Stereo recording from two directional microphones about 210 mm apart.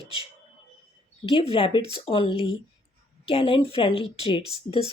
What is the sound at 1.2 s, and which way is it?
Speech, 25° left (ahead or behind).